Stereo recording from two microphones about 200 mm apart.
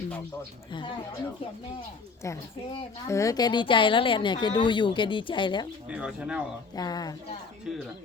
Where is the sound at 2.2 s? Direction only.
15° left (ahead or behind).